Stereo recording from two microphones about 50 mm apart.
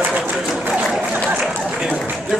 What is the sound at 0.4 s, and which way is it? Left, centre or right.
Applause, centre.